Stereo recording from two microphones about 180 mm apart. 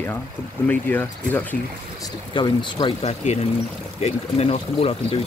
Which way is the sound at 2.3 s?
25° left (ahead or behind).